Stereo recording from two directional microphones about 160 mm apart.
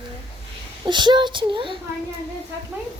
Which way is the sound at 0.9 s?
30° right (ahead or behind).